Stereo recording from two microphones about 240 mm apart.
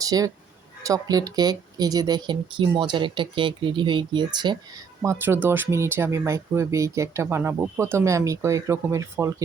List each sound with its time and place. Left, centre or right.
0.0 s speech: centre